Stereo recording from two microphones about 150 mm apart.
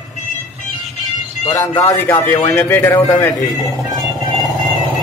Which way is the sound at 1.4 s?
20° left (ahead or behind).